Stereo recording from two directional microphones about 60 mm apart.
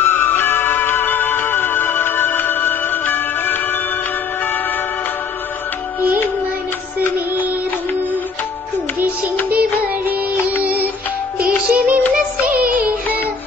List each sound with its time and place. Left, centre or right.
0.0 s music: left
9.5 s music: right